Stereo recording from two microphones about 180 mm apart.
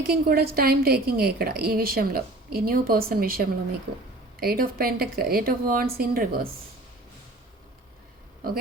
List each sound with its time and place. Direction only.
0.1 s a woman's voice: 55° right (ahead or behind)